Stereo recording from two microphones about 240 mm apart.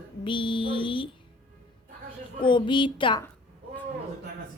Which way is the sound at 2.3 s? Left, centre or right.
Centre.